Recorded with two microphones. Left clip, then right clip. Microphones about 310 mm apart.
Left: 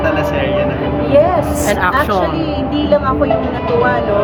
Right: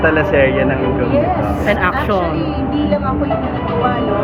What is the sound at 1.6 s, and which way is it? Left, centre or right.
Speech, centre.